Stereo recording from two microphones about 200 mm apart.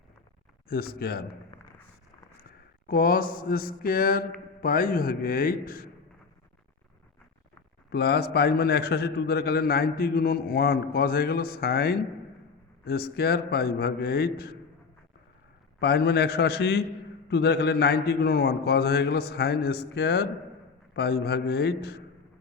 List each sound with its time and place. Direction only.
0.7 s a man's voice: 50° left (ahead or behind)
2.8 s a man's voice: 45° left (ahead or behind)
7.9 s a man's voice: 55° left (ahead or behind)
15.8 s a man's voice: 55° left (ahead or behind)